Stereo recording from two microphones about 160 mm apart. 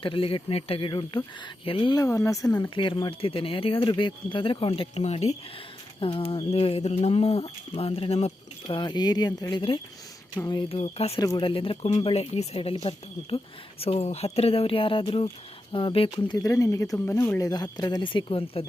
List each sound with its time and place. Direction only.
0.0 s speech: 35° left (ahead or behind)
2.0 s speech: 20° left (ahead or behind); by 11.2 s 40° left (ahead or behind)
11.2 s speech: 25° left (ahead or behind)
16.1 s speech: 25° left (ahead or behind)